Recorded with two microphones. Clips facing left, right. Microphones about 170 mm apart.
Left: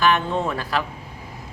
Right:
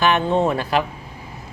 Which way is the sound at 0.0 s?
25° right (ahead or behind).